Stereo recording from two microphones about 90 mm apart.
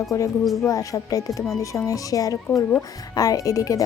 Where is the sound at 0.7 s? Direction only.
40° left (ahead or behind).